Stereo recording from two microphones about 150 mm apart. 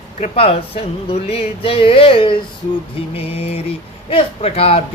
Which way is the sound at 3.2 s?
45° left (ahead or behind).